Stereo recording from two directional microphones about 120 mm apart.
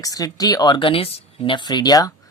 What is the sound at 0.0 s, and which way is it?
Speech, 30° left (ahead or behind).